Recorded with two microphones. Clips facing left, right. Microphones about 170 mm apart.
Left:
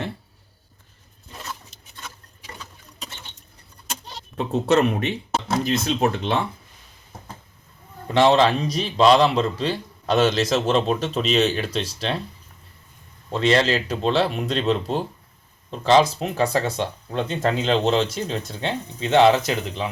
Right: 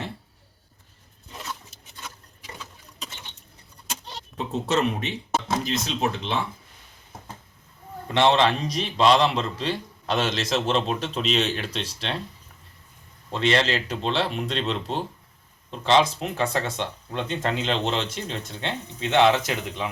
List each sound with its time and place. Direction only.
4.4 s speech: 60° left (ahead or behind)
8.1 s speech: 40° left (ahead or behind)
13.3 s speech: 40° left (ahead or behind)